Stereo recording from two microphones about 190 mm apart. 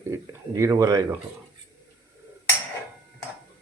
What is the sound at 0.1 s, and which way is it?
Speech, 15° right (ahead or behind).